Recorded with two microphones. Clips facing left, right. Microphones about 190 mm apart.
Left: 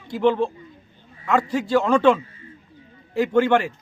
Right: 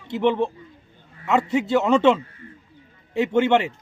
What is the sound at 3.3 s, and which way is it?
Speech, 20° right (ahead or behind).